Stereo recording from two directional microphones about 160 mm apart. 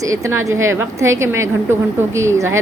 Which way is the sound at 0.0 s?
20° right (ahead or behind).